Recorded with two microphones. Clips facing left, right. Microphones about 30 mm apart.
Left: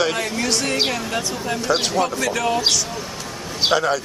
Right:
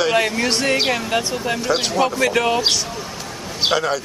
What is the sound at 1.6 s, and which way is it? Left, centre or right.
Speech, centre.